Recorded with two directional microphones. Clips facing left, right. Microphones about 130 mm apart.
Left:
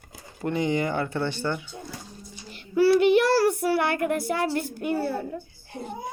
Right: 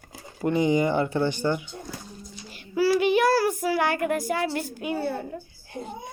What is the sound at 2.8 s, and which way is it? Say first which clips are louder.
Speech: left 3 dB; 60° left (ahead or behind).